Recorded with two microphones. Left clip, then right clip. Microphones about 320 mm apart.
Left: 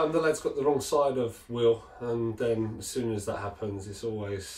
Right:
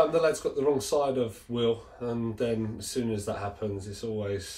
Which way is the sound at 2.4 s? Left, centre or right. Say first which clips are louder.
Left 1 dB; centre.